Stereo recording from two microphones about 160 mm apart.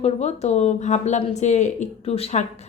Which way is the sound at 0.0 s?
45° left (ahead or behind).